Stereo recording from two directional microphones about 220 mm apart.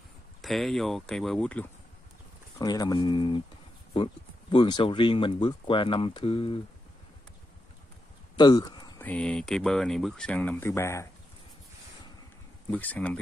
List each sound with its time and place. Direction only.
0.4 s speech: centre (ahead or behind)
2.6 s speech: 15° left (ahead or behind)
8.4 s speech: 20° left (ahead or behind)
12.7 s speech: 5° left (ahead or behind)